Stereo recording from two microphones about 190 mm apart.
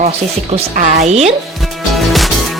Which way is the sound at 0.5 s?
35° right (ahead or behind).